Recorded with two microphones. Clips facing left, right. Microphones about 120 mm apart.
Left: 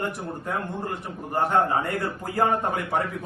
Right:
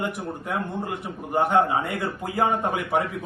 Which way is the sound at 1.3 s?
15° right (ahead or behind).